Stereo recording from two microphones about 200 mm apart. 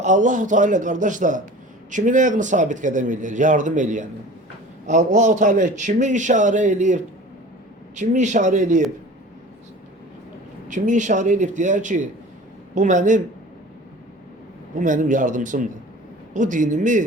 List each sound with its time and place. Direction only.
0.0 s speech: 40° right (ahead or behind)
10.7 s speech: 40° right (ahead or behind)
14.8 s speech: 40° right (ahead or behind)